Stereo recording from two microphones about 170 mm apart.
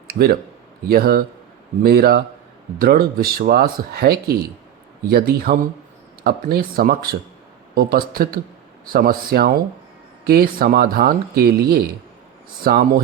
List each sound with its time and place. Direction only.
0.1 s speech: 60° right (ahead or behind)